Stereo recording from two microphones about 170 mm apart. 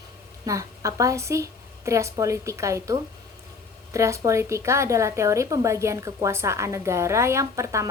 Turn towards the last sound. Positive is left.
turn(degrees=-20)  # may be behind; listen again after turning